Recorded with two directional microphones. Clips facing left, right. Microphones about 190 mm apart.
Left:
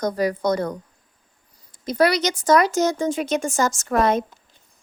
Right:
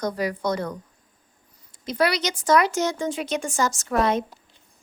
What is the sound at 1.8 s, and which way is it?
A woman's voice, 40° left (ahead or behind).